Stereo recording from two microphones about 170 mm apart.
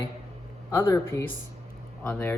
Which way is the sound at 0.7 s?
15° left (ahead or behind).